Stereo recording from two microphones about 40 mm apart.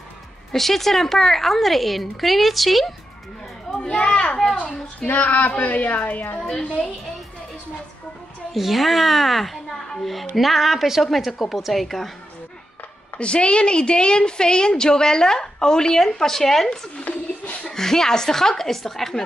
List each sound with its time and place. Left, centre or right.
0.5 s a woman's voice: centre
3.7 s a child's voice: left
5.0 s female singing: left
5.6 s a woman's voice: left
6.3 s a woman's voice: centre
8.5 s a child's voice: centre
13.2 s a woman's voice: left; by 16.8 s centre
16.9 s speech: left
17.6 s a woman's voice: centre